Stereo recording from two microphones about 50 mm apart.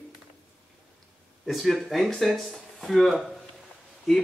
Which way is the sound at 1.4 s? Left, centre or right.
Centre.